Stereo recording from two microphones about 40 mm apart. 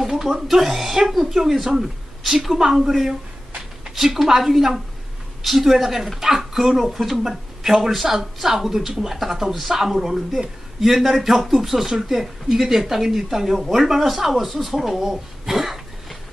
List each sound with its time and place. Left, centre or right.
0.0 s speech: centre